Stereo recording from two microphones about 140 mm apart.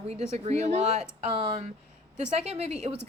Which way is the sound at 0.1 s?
50° right (ahead or behind).